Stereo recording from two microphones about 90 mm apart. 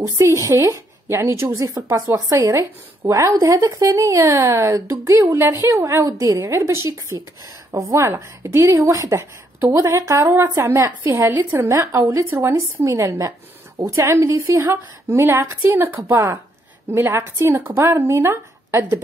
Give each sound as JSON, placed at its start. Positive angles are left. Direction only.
{"t": 0.0, "sound": "a woman's voice", "side_deg": -35}